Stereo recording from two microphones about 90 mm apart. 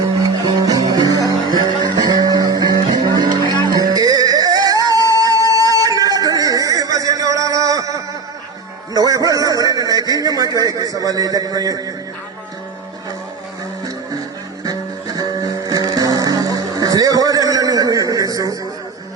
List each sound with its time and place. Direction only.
0.2 s music: 45° right (ahead or behind)
8.9 s a sound: 45° right (ahead or behind)
14.6 s music: 45° right (ahead or behind)